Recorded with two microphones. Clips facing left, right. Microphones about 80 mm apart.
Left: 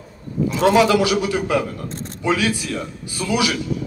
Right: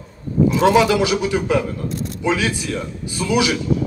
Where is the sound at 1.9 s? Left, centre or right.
Left.